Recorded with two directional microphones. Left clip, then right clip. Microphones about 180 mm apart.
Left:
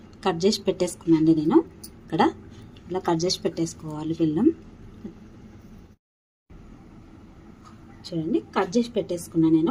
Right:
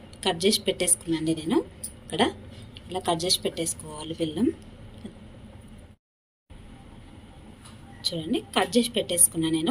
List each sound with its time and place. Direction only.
0.2 s a woman's voice: 50° left (ahead or behind)
8.0 s a woman's voice: 40° left (ahead or behind)